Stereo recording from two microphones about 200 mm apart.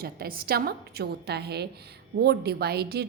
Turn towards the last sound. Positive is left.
turn(degrees=-55)  # may be behind; listen again after turning